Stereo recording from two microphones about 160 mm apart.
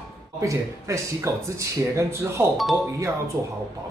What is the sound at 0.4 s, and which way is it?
Speech, 20° right (ahead or behind).